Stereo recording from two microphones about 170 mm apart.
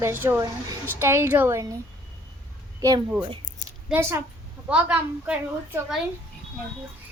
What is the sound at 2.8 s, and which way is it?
A woman's voice, 20° right (ahead or behind).